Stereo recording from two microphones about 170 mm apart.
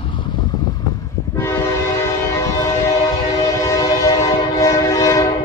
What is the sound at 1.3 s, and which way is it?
Train, 15° left (ahead or behind).